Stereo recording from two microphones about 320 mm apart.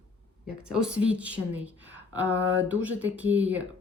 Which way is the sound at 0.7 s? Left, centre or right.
Centre.